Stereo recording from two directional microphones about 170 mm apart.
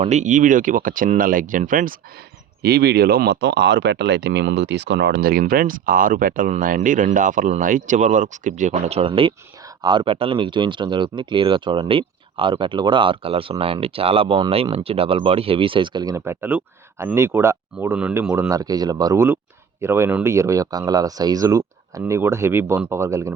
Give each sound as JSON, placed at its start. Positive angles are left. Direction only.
{"t": 0.0, "sound": "speech", "side_deg": -45}
{"t": 2.6, "sound": "speech", "side_deg": -70}